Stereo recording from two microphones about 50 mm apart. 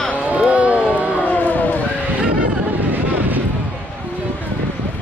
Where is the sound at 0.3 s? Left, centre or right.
Right.